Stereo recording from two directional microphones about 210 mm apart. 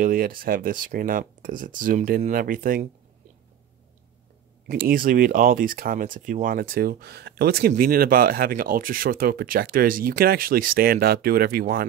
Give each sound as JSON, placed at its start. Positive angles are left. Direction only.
{"t": 0.0, "sound": "speech", "side_deg": -40}
{"t": 4.6, "sound": "speech", "side_deg": -45}